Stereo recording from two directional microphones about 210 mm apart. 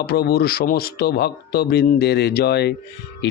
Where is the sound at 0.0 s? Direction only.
45° left (ahead or behind).